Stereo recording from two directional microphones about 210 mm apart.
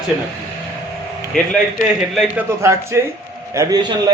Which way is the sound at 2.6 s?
10° right (ahead or behind).